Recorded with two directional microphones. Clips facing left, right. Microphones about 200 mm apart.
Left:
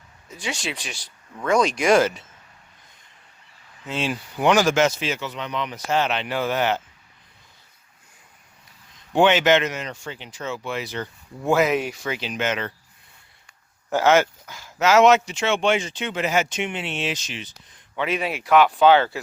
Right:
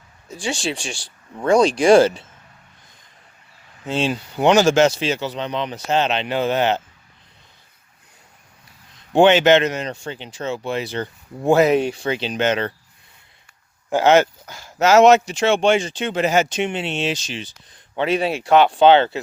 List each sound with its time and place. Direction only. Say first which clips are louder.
0.3 s speech: right 5 dB; 30° right (ahead or behind)
3.8 s speech: right 5 dB; 30° right (ahead or behind)
9.1 s speech: right 4 dB; 30° right (ahead or behind)
13.9 s speech: right 3 dB; 20° right (ahead or behind)
14.4 s speech: right 3 dB; 35° right (ahead or behind)